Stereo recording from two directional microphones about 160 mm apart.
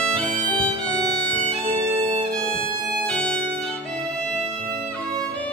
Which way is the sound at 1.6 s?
30° right (ahead or behind).